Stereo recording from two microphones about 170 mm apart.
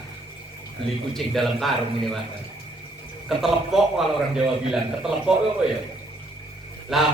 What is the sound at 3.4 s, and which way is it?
A man's voice, centre (ahead or behind).